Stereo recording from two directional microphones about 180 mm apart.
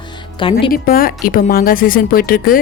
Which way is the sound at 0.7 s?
55° left (ahead or behind).